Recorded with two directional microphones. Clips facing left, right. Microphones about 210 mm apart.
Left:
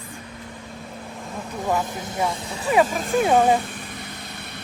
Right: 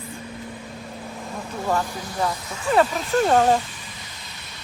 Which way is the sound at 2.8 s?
50° left (ahead or behind).